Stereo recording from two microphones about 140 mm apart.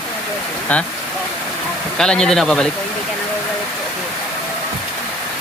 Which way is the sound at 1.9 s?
5° left (ahead or behind).